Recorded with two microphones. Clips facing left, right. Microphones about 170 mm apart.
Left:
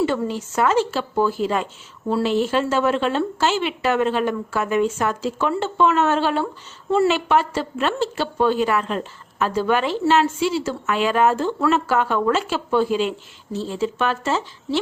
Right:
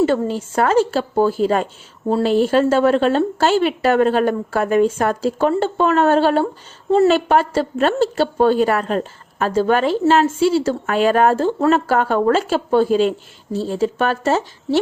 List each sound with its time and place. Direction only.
0.0 s a woman's voice: 45° right (ahead or behind)